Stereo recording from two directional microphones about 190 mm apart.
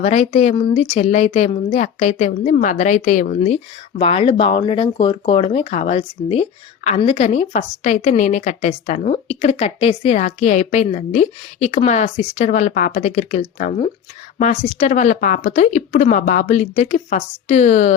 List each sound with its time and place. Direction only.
0.0 s speech: 35° left (ahead or behind)